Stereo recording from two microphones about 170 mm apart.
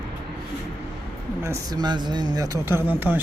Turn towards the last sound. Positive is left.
turn(degrees=-10)  # may be behind; listen again after turning